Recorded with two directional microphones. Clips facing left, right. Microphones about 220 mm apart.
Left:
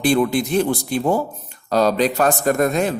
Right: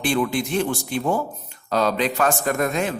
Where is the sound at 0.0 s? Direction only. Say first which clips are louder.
Left 5 dB; 40° left (ahead or behind).